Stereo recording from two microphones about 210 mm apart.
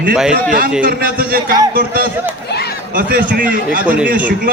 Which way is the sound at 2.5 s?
50° left (ahead or behind).